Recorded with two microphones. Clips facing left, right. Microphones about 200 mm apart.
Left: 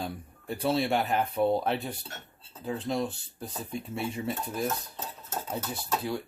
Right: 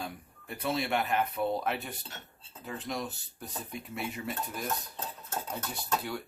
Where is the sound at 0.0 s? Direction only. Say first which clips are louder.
Left 4 dB; 30° left (ahead or behind).